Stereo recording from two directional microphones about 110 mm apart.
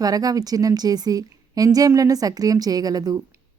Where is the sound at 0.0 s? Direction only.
35° right (ahead or behind).